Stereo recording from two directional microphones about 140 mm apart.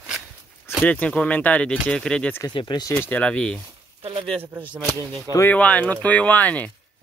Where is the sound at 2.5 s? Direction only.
30° left (ahead or behind).